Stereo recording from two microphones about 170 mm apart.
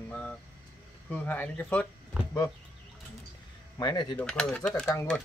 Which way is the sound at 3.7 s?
25° left (ahead or behind).